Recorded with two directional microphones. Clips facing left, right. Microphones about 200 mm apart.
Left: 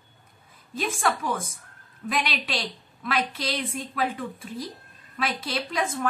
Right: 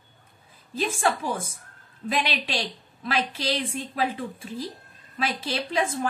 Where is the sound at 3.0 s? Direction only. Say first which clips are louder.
Right 1 dB; 30° right (ahead or behind).